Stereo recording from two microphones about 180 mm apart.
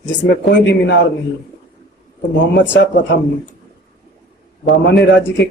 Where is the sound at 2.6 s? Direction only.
80° left.